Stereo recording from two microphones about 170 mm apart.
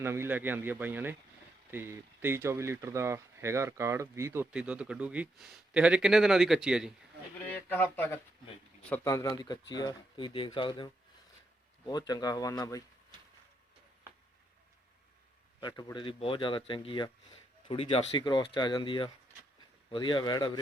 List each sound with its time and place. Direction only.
0.0 s speech: 15° right (ahead or behind)
7.7 s speech: 10° left (ahead or behind)
15.6 s speech: 25° left (ahead or behind)